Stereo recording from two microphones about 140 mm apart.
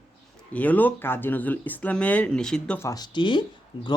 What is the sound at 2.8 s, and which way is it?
Speech, 25° left (ahead or behind).